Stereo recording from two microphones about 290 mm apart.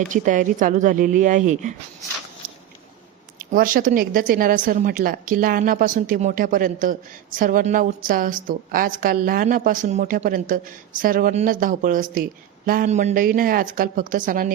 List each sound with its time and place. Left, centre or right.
0.1 s a woman's voice: right
3.3 s a woman's voice: right